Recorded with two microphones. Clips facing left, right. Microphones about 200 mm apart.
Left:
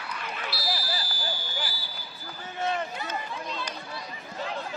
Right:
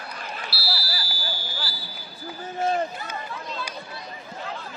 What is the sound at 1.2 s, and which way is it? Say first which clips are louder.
Fire alarm: even; 20° left (ahead or behind).